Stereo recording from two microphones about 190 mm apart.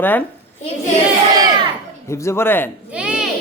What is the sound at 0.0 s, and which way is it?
Speech, 10° left (ahead or behind).